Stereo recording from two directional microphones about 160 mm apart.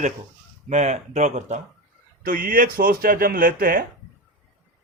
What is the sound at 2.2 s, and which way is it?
Speech, 60° right (ahead or behind).